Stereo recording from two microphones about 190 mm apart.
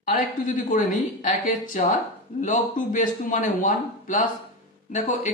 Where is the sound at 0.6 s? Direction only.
45° left (ahead or behind).